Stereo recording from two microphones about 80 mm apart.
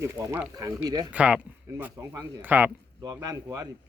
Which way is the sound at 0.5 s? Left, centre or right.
Right.